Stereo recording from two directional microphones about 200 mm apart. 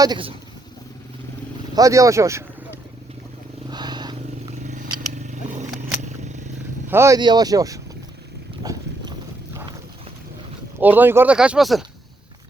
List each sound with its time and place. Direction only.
0.0 s speech: 25° right (ahead or behind)
1.7 s speech: 15° right (ahead or behind)
3.7 s vehicle: 20° right (ahead or behind)
4.6 s a sound: 40° right (ahead or behind)
6.8 s speech: 10° right (ahead or behind)
8.6 s a sound: 15° right (ahead or behind)
10.8 s speech: 10° right (ahead or behind)